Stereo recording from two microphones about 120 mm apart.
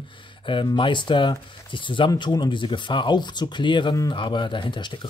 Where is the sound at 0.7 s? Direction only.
45° left (ahead or behind).